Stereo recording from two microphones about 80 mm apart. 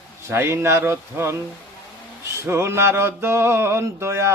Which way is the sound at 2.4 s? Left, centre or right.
Right.